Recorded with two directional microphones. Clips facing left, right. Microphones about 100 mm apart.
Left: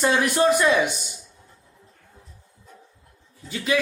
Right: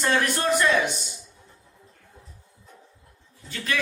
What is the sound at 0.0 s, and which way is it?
Speech, 15° left (ahead or behind).